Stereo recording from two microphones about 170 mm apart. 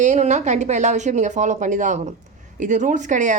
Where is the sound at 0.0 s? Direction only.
45° right (ahead or behind).